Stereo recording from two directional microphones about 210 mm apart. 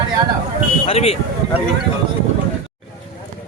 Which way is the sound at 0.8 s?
30° left (ahead or behind).